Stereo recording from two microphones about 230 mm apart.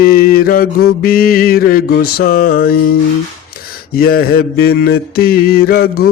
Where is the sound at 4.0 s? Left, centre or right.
Left.